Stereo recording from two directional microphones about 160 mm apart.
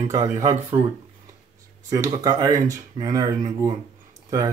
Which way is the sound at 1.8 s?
20° right (ahead or behind).